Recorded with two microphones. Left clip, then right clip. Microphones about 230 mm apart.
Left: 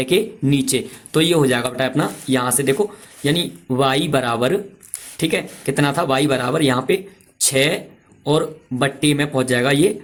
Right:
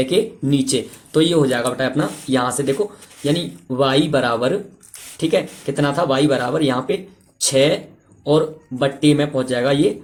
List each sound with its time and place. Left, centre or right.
0.0 s speech: left